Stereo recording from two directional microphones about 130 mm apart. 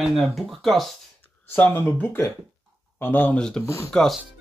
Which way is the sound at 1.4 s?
15° left (ahead or behind).